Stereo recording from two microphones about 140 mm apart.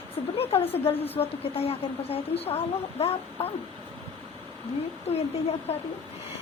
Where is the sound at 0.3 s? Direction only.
45° left (ahead or behind).